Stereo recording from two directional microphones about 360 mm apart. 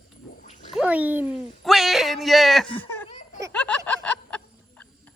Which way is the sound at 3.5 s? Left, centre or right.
Centre.